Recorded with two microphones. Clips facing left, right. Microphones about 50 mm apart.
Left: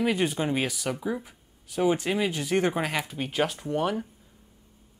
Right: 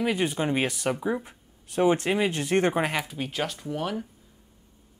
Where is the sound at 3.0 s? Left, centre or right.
Centre.